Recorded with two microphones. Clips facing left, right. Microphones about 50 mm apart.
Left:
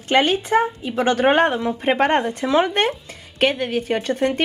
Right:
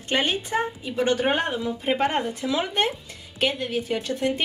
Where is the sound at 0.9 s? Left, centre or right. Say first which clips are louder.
Left 6 dB; left.